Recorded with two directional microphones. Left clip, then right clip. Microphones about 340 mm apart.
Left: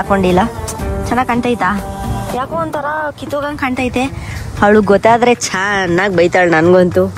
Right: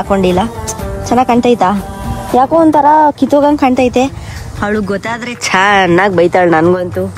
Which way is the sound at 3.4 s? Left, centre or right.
Centre.